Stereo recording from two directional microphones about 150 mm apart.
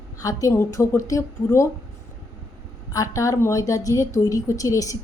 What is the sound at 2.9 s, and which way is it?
Speech, 20° left (ahead or behind).